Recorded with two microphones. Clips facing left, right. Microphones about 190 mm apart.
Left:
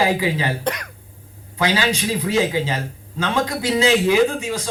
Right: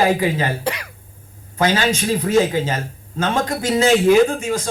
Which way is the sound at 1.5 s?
45° right (ahead or behind).